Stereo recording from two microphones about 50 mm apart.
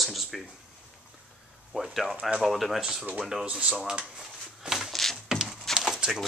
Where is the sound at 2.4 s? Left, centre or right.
Centre.